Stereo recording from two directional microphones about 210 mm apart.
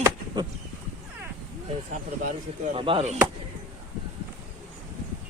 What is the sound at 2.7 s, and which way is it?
Speech, 25° right (ahead or behind).